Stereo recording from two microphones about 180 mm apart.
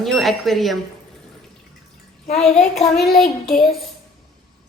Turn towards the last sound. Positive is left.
turn(degrees=0)  # may be behind; listen again after turning